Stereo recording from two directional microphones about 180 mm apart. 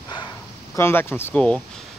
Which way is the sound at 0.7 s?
15° left (ahead or behind).